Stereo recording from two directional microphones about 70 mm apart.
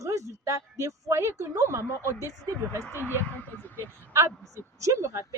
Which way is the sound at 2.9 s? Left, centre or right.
Right.